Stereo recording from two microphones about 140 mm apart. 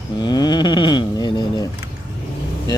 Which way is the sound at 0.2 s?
30° left (ahead or behind).